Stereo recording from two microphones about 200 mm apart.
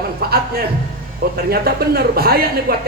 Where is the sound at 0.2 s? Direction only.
50° right (ahead or behind).